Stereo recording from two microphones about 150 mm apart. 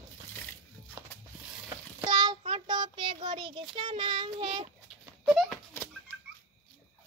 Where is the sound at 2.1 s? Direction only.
30° right (ahead or behind).